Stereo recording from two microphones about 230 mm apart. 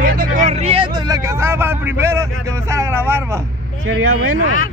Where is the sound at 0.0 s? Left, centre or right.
Right; by 3.2 s centre.